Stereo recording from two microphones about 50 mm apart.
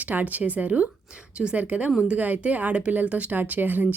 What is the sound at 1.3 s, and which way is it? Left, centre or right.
Speech, right.